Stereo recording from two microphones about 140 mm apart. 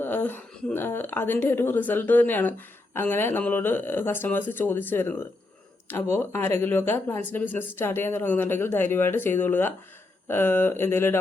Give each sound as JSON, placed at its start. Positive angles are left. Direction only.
{"t": 0.0, "sound": "speech", "side_deg": 15}